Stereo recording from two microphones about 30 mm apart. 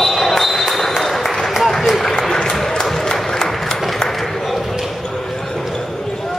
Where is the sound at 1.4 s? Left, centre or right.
Centre.